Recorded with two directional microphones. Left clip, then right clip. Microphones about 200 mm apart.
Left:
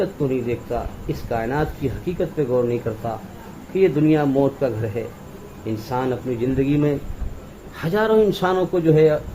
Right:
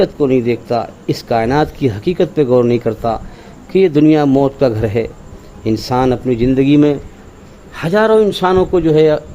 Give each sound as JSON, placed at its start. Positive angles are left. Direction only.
{"t": 0.0, "sound": "speech", "side_deg": -55}
{"t": 7.8, "sound": "a man's voice", "side_deg": -30}
{"t": 8.7, "sound": "speech", "side_deg": -40}